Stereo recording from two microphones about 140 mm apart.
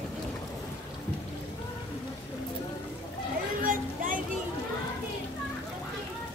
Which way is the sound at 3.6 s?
70° right (ahead or behind).